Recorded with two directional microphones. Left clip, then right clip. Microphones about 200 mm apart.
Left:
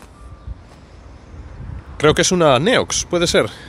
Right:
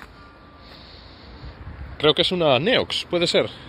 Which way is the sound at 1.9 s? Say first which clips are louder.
Left 4 dB; 20° left (ahead or behind).